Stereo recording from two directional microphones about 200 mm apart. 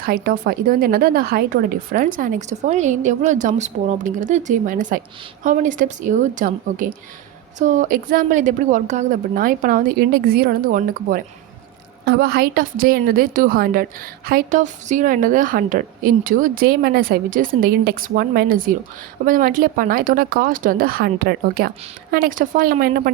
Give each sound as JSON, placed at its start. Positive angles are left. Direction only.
{"t": 0.0, "sound": "a woman's voice", "side_deg": -50}